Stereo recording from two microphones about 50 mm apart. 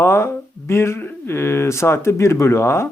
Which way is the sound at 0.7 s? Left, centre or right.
Left.